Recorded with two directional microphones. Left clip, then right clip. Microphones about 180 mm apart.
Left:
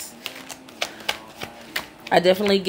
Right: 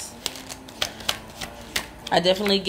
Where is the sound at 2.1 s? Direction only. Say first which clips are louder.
Left 3 dB; 55° left (ahead or behind).